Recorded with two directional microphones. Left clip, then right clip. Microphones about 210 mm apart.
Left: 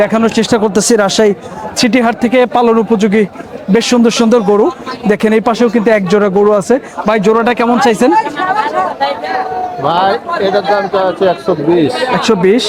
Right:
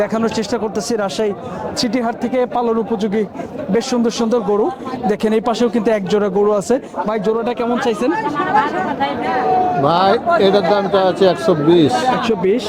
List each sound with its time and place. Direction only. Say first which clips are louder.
0.0 s speech: left 7 dB; 25° left (ahead or behind)
7.1 s speech: left 9 dB; 25° left (ahead or behind)
9.8 s speech: left 7 dB; 35° right (ahead or behind)
11.9 s a man's voice: left 2 dB; 55° right (ahead or behind)
12.2 s a man's voice: left 7 dB; 30° left (ahead or behind)